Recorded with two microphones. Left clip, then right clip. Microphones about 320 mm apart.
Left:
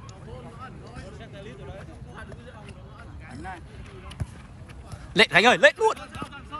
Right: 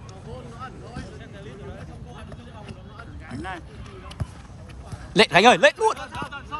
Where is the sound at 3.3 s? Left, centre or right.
Right.